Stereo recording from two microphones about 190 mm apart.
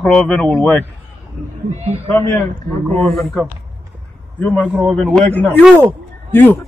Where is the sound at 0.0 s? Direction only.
5° left (ahead or behind).